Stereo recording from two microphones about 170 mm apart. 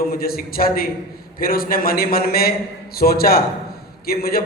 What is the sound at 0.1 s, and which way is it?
A man's voice, 60° left (ahead or behind).